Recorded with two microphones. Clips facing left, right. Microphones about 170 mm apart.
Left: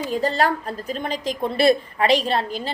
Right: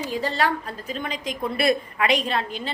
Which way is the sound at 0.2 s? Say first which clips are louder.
Left 3 dB; 40° left (ahead or behind).